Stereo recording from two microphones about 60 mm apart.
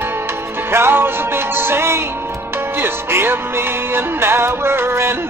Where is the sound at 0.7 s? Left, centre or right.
Right.